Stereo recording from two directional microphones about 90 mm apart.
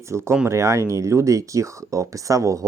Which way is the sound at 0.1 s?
30° right (ahead or behind).